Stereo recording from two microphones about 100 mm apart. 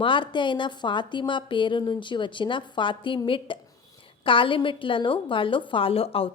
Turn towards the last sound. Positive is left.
turn(degrees=70)  # may be behind; listen again after turning